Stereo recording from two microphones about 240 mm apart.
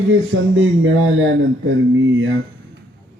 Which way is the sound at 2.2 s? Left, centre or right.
Right.